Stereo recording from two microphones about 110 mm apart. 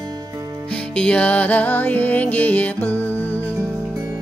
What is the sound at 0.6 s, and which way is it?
Music, 10° left (ahead or behind).